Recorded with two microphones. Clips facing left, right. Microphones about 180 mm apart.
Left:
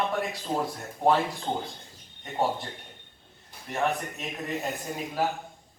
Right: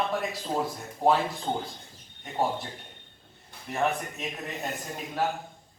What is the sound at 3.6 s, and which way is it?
A man's voice, centre (ahead or behind).